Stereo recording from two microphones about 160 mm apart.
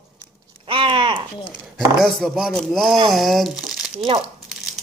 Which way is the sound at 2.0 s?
Centre (ahead or behind).